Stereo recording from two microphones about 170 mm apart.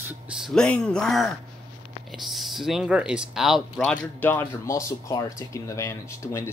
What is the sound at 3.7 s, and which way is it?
Speech, 10° left (ahead or behind).